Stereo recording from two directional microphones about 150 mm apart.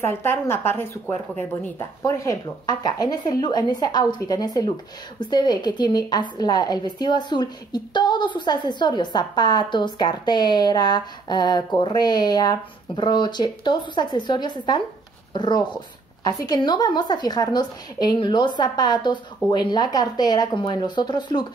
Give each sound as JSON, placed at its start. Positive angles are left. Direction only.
{"t": 0.0, "sound": "a woman's voice", "side_deg": 15}